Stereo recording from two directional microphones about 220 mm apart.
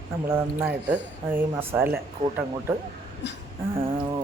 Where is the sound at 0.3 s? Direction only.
10° right (ahead or behind).